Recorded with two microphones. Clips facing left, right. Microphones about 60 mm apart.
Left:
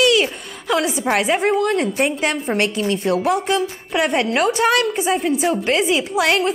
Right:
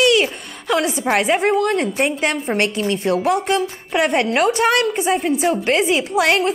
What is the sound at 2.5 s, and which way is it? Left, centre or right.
Speech, right.